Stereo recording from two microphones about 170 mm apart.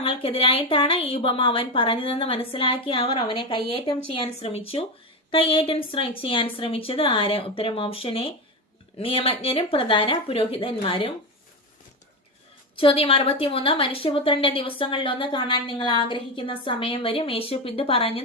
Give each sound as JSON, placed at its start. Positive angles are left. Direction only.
{"t": 0.0, "sound": "a woman's voice", "side_deg": 35}
{"t": 12.7, "sound": "a woman's voice", "side_deg": 30}